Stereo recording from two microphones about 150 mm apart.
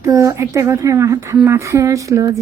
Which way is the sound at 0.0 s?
20° right (ahead or behind).